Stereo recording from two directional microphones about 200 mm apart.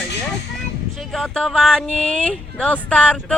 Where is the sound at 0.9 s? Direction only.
Centre (ahead or behind).